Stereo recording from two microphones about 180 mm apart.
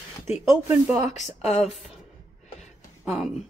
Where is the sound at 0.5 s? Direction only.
5° right (ahead or behind).